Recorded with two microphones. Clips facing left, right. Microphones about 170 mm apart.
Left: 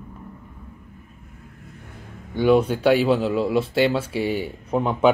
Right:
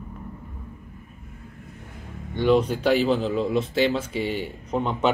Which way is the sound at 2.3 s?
5° left (ahead or behind).